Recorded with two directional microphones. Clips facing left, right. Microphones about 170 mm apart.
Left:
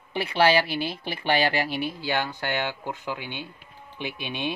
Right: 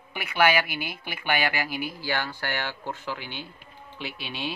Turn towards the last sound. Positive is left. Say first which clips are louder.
# left 3 dB
turn(degrees=20)  # may be behind; listen again after turning